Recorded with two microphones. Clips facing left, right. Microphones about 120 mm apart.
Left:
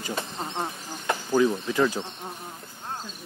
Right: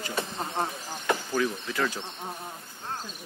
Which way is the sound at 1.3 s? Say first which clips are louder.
Left 6 dB; 20° left (ahead or behind).